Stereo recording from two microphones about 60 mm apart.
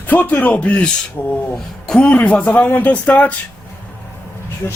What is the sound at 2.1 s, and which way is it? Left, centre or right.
Speech, left.